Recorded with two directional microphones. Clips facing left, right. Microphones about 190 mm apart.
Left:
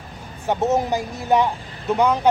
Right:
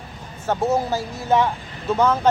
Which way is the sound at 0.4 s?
20° left (ahead or behind).